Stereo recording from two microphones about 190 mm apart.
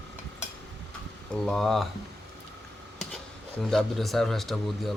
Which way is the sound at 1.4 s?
5° left (ahead or behind).